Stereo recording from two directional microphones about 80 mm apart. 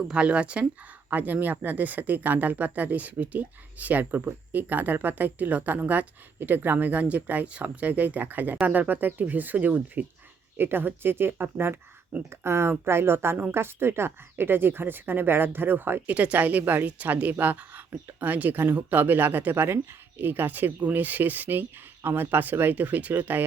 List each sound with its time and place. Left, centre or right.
0.1 s a woman's voice: centre